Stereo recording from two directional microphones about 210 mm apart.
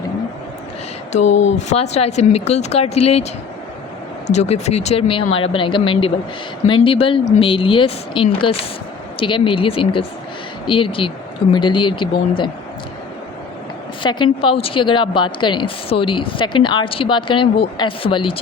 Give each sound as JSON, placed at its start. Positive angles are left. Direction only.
{"t": 1.1, "sound": "speech", "side_deg": 35}
{"t": 4.3, "sound": "a woman's voice", "side_deg": 30}
{"t": 14.0, "sound": "a woman's voice", "side_deg": 20}